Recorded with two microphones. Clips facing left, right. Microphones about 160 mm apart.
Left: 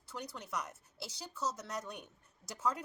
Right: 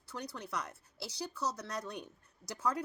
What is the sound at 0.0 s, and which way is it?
A woman's voice, 20° left (ahead or behind).